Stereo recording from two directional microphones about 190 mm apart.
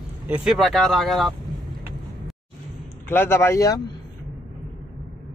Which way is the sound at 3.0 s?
10° left (ahead or behind).